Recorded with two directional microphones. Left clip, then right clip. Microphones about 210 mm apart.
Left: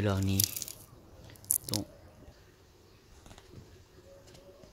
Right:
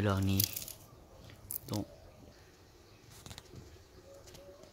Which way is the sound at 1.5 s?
40° left (ahead or behind).